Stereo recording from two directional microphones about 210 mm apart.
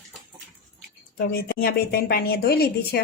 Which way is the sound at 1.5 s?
45° left (ahead or behind).